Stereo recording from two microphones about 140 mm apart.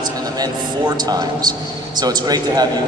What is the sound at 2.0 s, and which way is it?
Speech, 30° right (ahead or behind).